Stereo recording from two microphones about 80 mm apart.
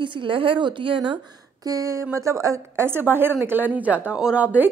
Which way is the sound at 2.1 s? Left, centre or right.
Right.